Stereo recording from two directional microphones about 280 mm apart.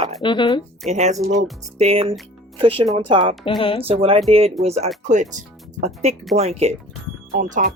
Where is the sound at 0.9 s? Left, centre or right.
Right.